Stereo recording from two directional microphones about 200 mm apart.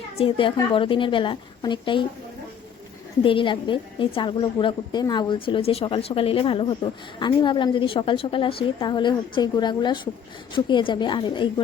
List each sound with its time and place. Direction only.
0.2 s a woman's voice: 25° left (ahead or behind)
3.2 s a woman's voice: 25° left (ahead or behind)